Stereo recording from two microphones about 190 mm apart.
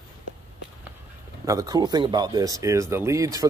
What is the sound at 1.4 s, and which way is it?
Speech, 20° right (ahead or behind).